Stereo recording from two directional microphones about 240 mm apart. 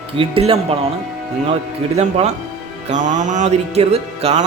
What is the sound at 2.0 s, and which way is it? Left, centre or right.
Speech, right.